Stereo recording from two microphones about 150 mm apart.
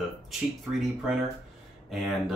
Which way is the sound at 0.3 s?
Centre (ahead or behind).